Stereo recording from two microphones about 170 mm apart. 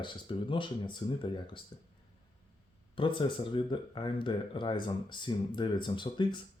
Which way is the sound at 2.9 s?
30° left (ahead or behind).